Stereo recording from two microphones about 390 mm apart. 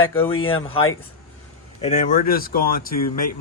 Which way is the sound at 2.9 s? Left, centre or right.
Left.